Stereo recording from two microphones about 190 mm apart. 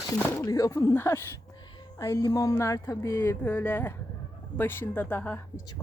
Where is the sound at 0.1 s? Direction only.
15° left (ahead or behind).